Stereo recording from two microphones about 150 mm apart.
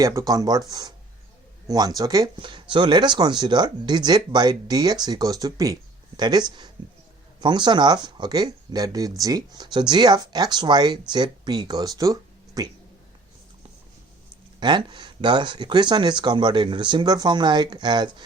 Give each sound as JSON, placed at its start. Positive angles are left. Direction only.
{"t": 0.0, "sound": "speech", "side_deg": -20}
{"t": 7.4, "sound": "speech", "side_deg": -30}
{"t": 14.6, "sound": "speech", "side_deg": -30}